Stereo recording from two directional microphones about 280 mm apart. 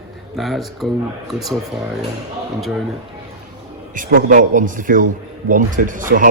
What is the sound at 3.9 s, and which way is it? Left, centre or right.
A man's voice, right.